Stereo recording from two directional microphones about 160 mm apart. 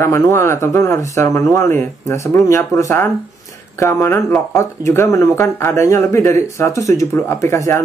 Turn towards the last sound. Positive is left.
turn(degrees=20)  # may be behind; listen again after turning